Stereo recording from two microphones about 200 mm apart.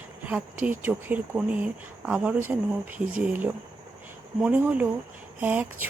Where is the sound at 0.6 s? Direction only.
10° right (ahead or behind).